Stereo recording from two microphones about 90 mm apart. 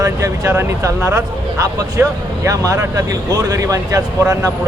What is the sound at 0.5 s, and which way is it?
Speech, 25° right (ahead or behind).